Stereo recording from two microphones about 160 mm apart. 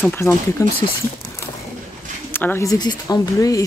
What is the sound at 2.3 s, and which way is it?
Speech, 15° left (ahead or behind).